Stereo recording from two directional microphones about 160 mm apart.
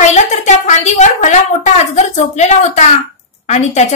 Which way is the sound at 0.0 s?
45° left (ahead or behind).